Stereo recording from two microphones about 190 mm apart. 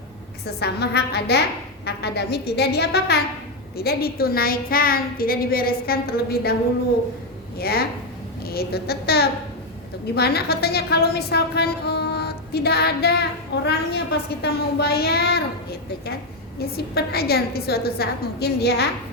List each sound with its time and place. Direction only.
0.4 s a woman's voice: 60° left (ahead or behind)
7.6 s a woman's voice: 55° left (ahead or behind)
16.7 s a woman's voice: 55° left (ahead or behind)